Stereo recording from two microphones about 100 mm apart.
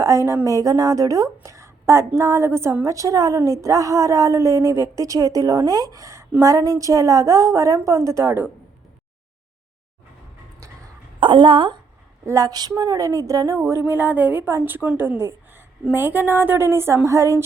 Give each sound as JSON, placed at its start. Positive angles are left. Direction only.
{"t": 0.0, "sound": "a woman's voice", "side_deg": -30}
{"t": 11.2, "sound": "a woman's voice", "side_deg": -55}
{"t": 12.2, "sound": "a woman's voice", "side_deg": -30}